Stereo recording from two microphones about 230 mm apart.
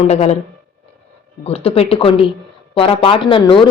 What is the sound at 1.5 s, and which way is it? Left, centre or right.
A woman's voice, left.